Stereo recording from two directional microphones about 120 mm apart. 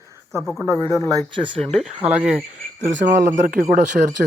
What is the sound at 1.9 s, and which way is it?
Speech, 60° right (ahead or behind).